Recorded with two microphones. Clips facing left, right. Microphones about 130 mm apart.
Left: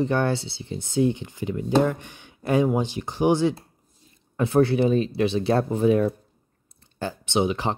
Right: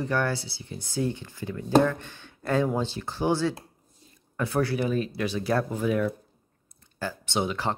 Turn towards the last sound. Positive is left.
turn(degrees=20)  # may be behind; listen again after turning